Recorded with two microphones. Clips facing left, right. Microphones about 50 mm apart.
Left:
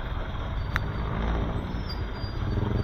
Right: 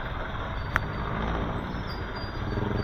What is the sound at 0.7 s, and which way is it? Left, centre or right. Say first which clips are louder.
Vehicle: right 2 dB; right.